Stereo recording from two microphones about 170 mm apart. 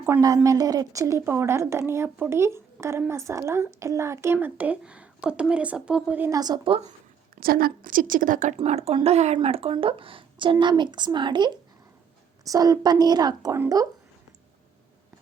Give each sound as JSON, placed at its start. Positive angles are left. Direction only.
{"t": 0.0, "sound": "speech", "side_deg": -15}
{"t": 6.4, "sound": "a woman's voice", "side_deg": -25}
{"t": 7.3, "sound": "a woman's voice", "side_deg": -60}
{"t": 8.5, "sound": "a woman's voice", "side_deg": -35}